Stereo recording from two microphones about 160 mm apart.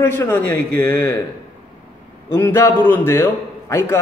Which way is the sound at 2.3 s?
15° left (ahead or behind).